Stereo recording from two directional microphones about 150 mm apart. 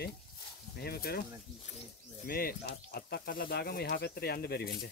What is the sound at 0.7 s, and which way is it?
Speech, 90° left.